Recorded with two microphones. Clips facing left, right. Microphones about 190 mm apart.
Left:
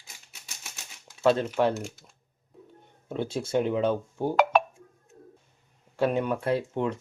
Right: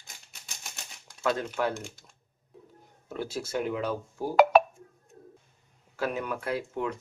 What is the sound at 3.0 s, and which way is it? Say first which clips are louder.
Speech: left 4 dB; 25° left (ahead or behind).